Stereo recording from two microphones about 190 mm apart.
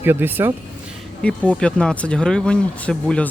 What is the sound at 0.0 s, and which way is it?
Speech, 10° right (ahead or behind).